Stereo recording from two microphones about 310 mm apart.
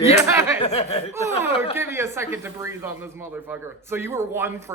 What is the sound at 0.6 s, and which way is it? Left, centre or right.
Speech, centre.